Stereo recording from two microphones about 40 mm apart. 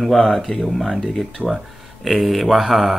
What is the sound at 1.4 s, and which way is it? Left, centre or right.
Speech, right.